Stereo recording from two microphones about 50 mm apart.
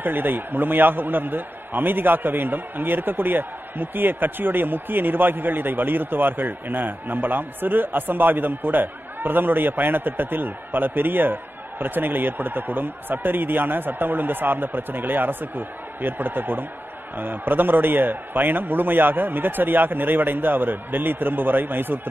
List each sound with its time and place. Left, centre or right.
0.0 s a man's voice: right